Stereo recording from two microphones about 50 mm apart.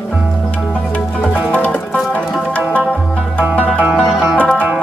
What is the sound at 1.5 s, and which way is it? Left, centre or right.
Music, left.